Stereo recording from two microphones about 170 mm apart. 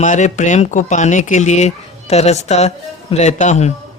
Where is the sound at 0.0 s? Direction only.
45° left (ahead or behind).